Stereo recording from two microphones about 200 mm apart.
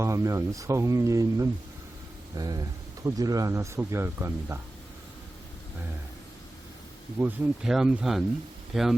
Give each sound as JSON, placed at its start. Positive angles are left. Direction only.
{"t": 0.0, "sound": "speech", "side_deg": -15}
{"t": 7.2, "sound": "speech", "side_deg": -5}